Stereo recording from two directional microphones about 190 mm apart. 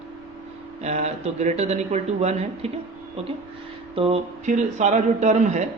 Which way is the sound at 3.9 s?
30° right (ahead or behind).